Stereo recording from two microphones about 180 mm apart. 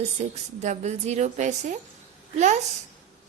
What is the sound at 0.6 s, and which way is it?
A woman's voice, 40° right (ahead or behind).